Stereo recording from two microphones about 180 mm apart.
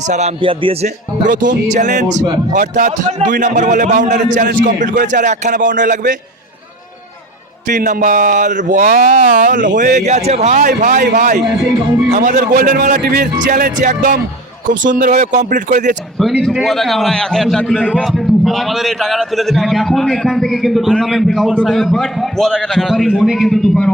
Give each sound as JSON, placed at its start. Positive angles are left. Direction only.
{"t": 0.1, "sound": "speech", "side_deg": -35}
{"t": 7.7, "sound": "speech", "side_deg": -50}
{"t": 12.4, "sound": "speech", "side_deg": -55}
{"t": 16.1, "sound": "a man's voice", "side_deg": 0}